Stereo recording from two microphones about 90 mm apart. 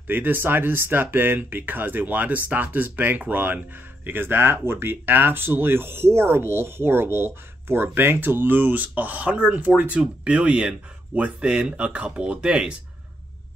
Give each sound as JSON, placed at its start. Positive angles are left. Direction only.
{"t": 0.0, "sound": "speech", "side_deg": -20}